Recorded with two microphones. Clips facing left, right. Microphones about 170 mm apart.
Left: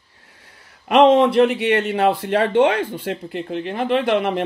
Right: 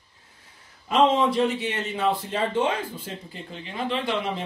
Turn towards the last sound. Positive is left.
turn(degrees=60)  # may be behind; listen again after turning